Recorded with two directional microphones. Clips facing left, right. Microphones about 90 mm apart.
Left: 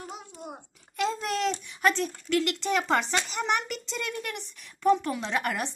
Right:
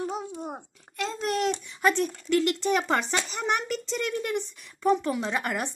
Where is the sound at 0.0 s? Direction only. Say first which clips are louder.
Right 8 dB; 35° right (ahead or behind).